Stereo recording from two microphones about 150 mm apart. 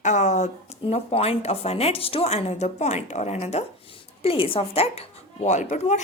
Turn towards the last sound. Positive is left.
turn(degrees=50)  # may be behind; listen again after turning